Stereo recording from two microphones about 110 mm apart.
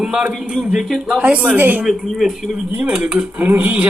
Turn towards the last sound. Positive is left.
turn(degrees=-15)  # may be behind; listen again after turning